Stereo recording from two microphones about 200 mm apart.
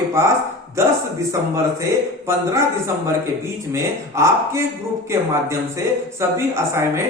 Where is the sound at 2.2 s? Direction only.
15° right (ahead or behind).